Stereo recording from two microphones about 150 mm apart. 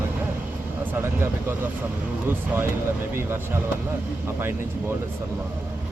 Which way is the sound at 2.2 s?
15° right (ahead or behind).